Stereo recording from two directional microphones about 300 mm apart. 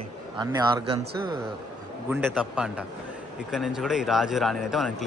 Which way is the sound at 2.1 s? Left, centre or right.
Centre.